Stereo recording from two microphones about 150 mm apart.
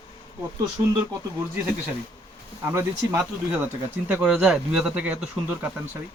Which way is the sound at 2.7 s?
15° right (ahead or behind).